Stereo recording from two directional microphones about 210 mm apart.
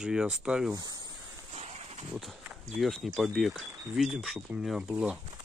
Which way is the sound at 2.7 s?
Centre (ahead or behind).